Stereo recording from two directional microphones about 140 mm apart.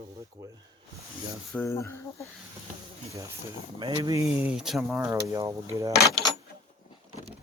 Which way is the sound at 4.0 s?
25° right (ahead or behind).